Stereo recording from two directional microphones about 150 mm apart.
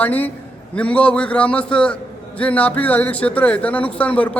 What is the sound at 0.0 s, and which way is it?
A man's voice, 10° left (ahead or behind).